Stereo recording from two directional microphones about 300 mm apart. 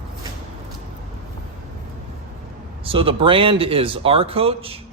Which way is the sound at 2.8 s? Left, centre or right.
Centre.